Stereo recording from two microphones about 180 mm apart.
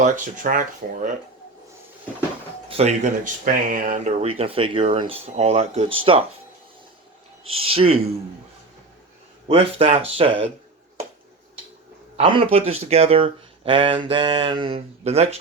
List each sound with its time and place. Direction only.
0.0 s speech: 50° right (ahead or behind)
2.6 s speech: 35° right (ahead or behind)
7.4 s speech: 30° right (ahead or behind)
9.5 s speech: 35° right (ahead or behind)
12.1 s speech: 30° right (ahead or behind)